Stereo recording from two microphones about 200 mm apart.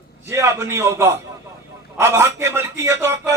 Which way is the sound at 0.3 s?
15° right (ahead or behind).